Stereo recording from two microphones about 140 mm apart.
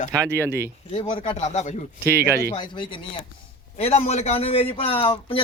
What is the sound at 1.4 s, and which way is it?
Speech, 50° left (ahead or behind).